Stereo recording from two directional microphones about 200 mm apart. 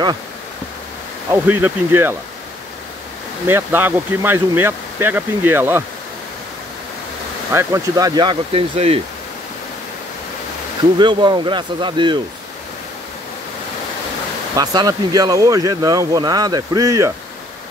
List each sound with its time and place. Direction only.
1.3 s speech: 10° right (ahead or behind)
3.4 s speech: 10° right (ahead or behind)
7.5 s speech: 15° right (ahead or behind)
11.0 s speech: 25° right (ahead or behind)
14.5 s speech: 20° right (ahead or behind)